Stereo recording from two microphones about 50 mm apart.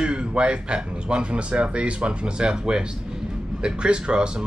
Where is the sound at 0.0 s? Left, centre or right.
Centre.